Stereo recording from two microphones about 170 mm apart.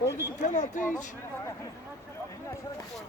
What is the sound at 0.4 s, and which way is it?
Speech, 45° left (ahead or behind).